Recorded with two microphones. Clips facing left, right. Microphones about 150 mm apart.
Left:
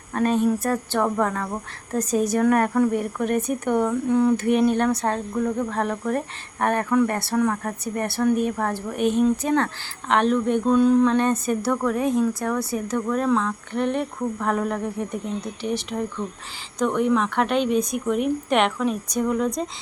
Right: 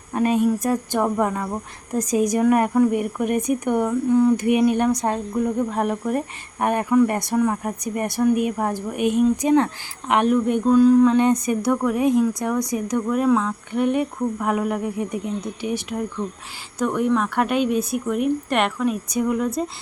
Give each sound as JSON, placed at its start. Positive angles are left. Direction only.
{"t": 0.1, "sound": "speech", "side_deg": -10}